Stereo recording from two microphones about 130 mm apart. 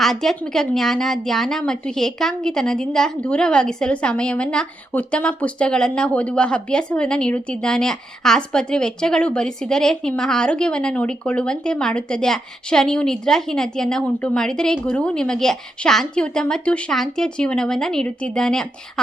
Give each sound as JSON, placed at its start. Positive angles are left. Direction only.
{"t": 0.0, "sound": "a woman's voice", "side_deg": 5}